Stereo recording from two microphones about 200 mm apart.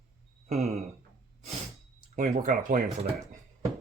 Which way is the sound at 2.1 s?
35° right (ahead or behind).